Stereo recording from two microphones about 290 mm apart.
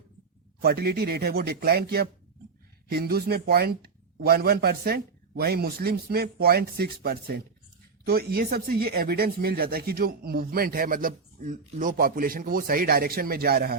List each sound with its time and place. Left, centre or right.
0.6 s speech: right